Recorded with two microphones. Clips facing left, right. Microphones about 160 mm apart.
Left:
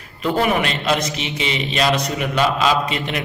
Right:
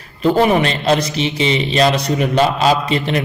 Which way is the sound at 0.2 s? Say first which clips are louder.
Right 5 dB; 30° right (ahead or behind).